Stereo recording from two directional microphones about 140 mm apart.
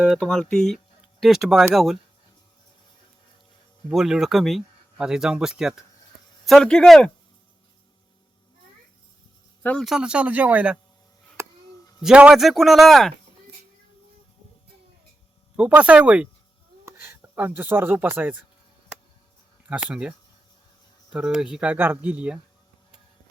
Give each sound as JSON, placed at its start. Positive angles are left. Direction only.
{"t": 0.2, "sound": "speech", "side_deg": 5}
{"t": 3.9, "sound": "speech", "side_deg": -5}
{"t": 9.6, "sound": "speech", "side_deg": 0}
{"t": 11.4, "sound": "a sound", "side_deg": -20}
{"t": 12.0, "sound": "speech", "side_deg": -5}
{"t": 15.5, "sound": "speech", "side_deg": -10}
{"t": 19.6, "sound": "speech", "side_deg": -10}